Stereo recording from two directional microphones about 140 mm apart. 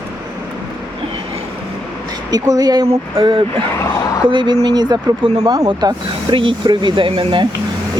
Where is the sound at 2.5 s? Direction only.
30° right (ahead or behind).